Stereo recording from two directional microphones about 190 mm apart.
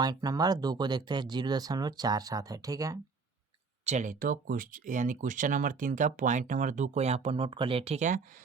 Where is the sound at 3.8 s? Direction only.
40° right (ahead or behind).